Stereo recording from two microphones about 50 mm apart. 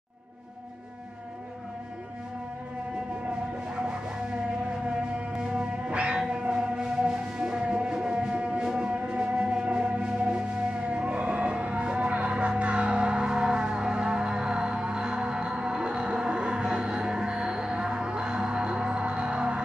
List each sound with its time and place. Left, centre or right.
5.5 s music: right